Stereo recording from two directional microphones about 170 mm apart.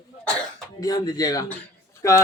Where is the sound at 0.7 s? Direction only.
20° left (ahead or behind).